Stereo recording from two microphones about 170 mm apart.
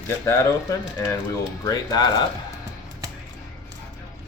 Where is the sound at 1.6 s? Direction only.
20° left (ahead or behind).